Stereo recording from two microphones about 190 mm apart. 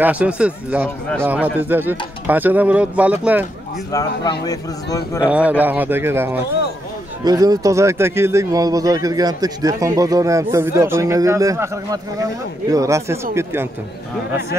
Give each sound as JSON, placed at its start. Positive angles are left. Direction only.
{"t": 0.0, "sound": "speech", "side_deg": -5}
{"t": 4.2, "sound": "a man's voice", "side_deg": 20}
{"t": 5.2, "sound": "speech", "side_deg": -5}
{"t": 6.4, "sound": "speech", "side_deg": 60}
{"t": 7.2, "sound": "speech", "side_deg": -20}